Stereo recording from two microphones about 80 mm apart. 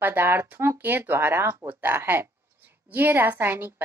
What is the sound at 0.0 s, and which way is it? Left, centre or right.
A woman's voice, right.